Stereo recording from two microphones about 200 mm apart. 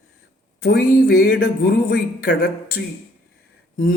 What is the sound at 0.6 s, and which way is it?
Speech, 50° left (ahead or behind).